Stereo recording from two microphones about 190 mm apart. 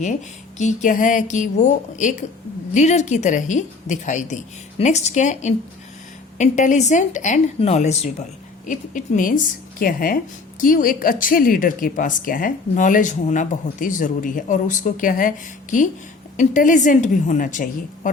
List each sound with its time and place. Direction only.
0.6 s a woman's voice: 40° left (ahead or behind)
16.4 s a woman's voice: 40° left (ahead or behind)